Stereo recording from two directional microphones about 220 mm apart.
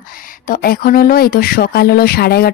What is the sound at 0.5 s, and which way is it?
Speech, 40° left (ahead or behind).